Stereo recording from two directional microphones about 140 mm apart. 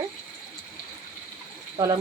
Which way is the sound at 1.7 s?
35° right (ahead or behind).